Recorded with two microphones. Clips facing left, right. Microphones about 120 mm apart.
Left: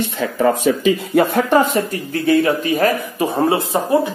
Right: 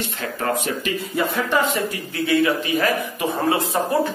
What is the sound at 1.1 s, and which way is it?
Speech, 50° left (ahead or behind).